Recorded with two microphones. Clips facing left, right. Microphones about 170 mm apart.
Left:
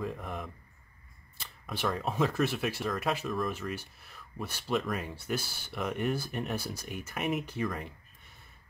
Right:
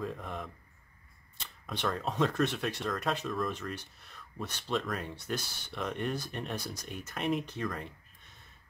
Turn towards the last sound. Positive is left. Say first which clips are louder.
# left 2 dB
turn(degrees=5)  # may be behind; listen again after turning